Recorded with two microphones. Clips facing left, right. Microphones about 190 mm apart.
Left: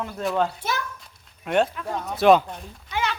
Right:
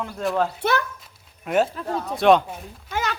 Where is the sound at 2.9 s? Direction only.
45° right (ahead or behind).